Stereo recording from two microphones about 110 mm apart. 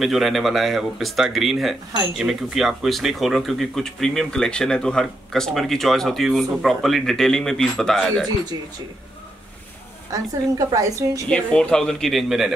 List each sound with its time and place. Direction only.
0.0 s speech: centre (ahead or behind)
10.7 s a woman's voice: 30° right (ahead or behind)
11.2 s speech: 10° left (ahead or behind)